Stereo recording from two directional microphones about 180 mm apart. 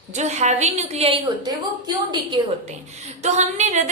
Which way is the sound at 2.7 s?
40° right (ahead or behind).